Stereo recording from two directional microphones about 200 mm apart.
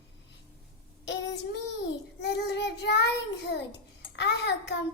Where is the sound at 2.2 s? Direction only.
60° left (ahead or behind).